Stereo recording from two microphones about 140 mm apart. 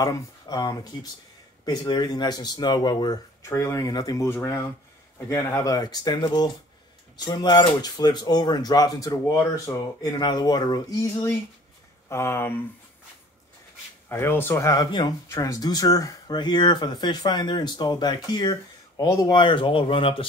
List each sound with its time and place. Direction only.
0.0 s speech: 25° left (ahead or behind)
9.7 s speech: 15° left (ahead or behind)
10.1 s speech: 30° left (ahead or behind)
14.0 s speech: 15° left (ahead or behind); by 20.2 s 40° left (ahead or behind)